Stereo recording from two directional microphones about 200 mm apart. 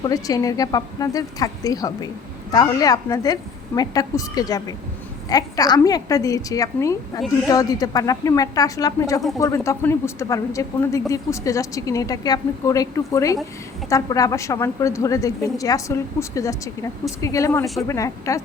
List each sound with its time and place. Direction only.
0.0 s a woman's voice: 20° left (ahead or behind)